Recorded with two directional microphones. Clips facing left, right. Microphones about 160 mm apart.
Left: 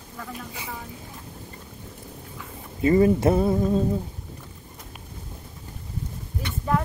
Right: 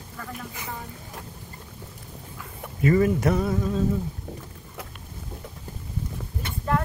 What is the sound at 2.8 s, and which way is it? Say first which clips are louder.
Speech: left 2 dB; 25° left (ahead or behind).